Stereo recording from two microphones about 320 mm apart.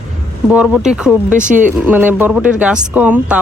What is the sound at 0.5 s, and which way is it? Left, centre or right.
Speech, centre.